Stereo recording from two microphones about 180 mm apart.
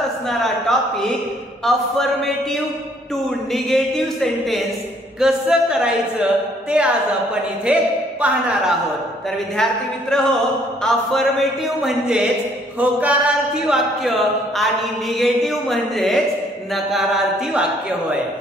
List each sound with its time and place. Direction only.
0.3 s a man's voice: centre (ahead or behind)
9.6 s a man's voice: 5° left (ahead or behind)